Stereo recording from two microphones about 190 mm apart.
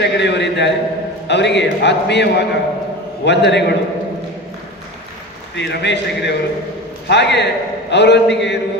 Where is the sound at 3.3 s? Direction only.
65° left (ahead or behind).